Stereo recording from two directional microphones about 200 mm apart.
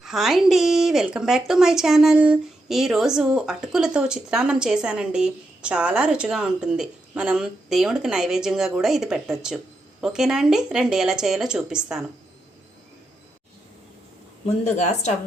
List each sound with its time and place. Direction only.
0.0 s a woman's voice: centre (ahead or behind)
14.6 s speech: 35° left (ahead or behind)